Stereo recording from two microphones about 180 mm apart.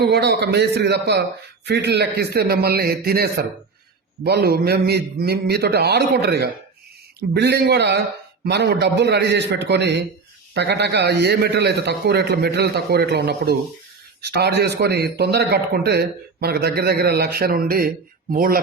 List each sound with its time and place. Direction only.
0.0 s a man's voice: 65° right (ahead or behind)